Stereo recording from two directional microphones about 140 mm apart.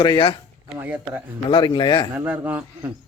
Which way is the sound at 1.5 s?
35° left (ahead or behind).